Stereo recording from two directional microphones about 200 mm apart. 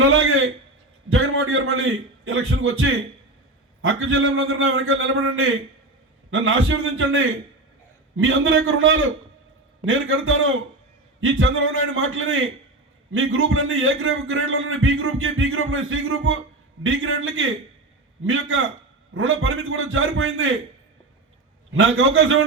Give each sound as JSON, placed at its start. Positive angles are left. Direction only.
{"t": 0.0, "sound": "a sound", "side_deg": -90}
{"t": 1.1, "sound": "a man's voice", "side_deg": -85}
{"t": 21.7, "sound": "a man's voice", "side_deg": -85}